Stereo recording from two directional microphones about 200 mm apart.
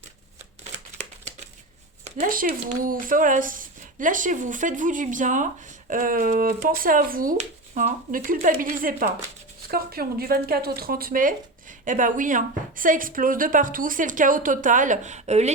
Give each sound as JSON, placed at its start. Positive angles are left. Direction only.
{"t": 2.0, "sound": "speech", "side_deg": -45}